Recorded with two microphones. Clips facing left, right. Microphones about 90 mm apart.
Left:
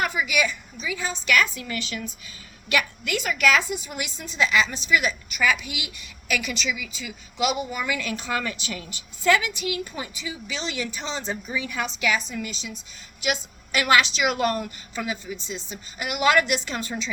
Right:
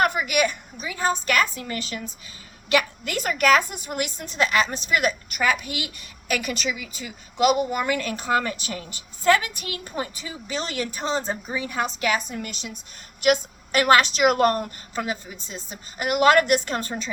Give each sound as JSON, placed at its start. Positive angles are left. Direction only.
{"t": 0.0, "sound": "a woman's voice", "side_deg": -50}